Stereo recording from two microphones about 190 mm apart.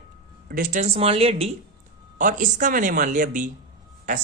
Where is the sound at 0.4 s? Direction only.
50° right (ahead or behind); by 1.5 s 30° right (ahead or behind).